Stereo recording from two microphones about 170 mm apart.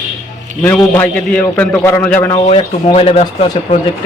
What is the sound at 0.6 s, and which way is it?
A man's voice, 15° left (ahead or behind).